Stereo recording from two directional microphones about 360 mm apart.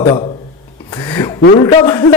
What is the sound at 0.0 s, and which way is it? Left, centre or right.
A man's voice, centre.